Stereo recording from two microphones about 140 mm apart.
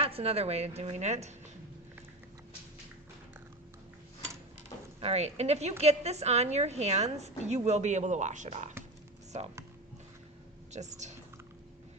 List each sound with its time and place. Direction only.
0.0 s a woman's voice: 45° right (ahead or behind)
4.9 s a woman's voice: 50° right (ahead or behind)
10.7 s speech: 55° right (ahead or behind)